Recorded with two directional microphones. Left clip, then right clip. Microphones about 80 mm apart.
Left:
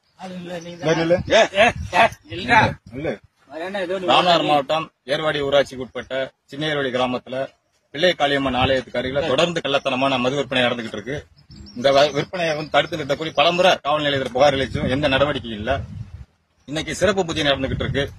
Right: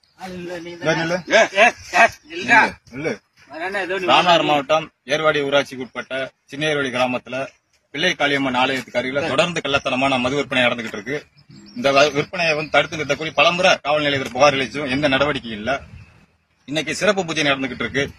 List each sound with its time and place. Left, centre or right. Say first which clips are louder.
0.7 s a man's voice: left 2 dB; left